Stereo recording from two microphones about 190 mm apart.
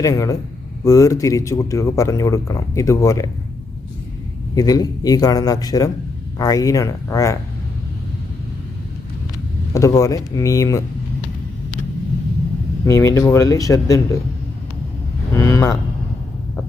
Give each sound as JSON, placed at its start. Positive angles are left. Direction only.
{"t": 0.0, "sound": "speech", "side_deg": 15}
{"t": 4.5, "sound": "a man's voice", "side_deg": 20}
{"t": 9.7, "sound": "speech", "side_deg": 15}
{"t": 12.8, "sound": "speech", "side_deg": 15}
{"t": 15.4, "sound": "speech", "side_deg": 15}